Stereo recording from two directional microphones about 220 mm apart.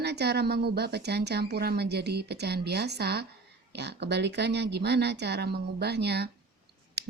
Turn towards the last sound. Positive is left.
turn(degrees=-50)  # may be behind; listen again after turning